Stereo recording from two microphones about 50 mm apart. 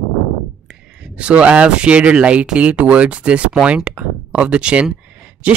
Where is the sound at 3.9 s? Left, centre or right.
Right.